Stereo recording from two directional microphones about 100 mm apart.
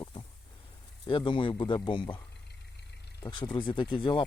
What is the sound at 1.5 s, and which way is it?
Speech, 45° left (ahead or behind).